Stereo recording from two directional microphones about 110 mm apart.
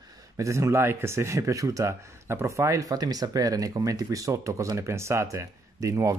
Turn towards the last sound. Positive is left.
turn(degrees=-30)  # may be behind; listen again after turning